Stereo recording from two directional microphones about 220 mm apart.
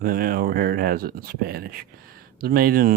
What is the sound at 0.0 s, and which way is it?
Speech, 40° right (ahead or behind).